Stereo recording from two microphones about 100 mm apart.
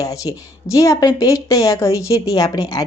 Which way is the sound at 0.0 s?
35° left (ahead or behind).